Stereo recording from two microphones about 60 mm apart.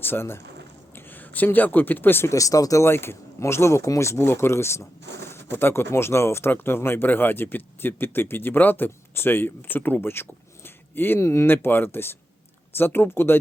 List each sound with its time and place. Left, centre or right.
0.0 s speech: left
0.9 s a sound: left
1.5 s speech: left
2.3 s speech: left
2.8 s speech: left